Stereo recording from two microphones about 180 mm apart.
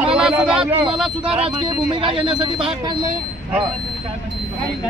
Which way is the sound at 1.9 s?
30° right (ahead or behind).